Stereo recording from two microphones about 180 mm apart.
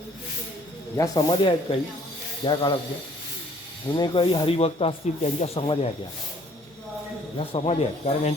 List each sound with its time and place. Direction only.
0.9 s speech: 20° left (ahead or behind)
3.8 s speech: 25° left (ahead or behind)
7.3 s speech: 35° left (ahead or behind)